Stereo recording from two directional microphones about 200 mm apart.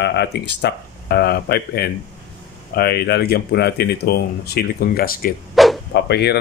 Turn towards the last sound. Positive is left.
turn(degrees=55)  # may be behind; listen again after turning